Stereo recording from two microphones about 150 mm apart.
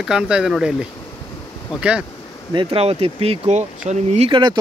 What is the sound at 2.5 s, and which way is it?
Speech, 40° right (ahead or behind).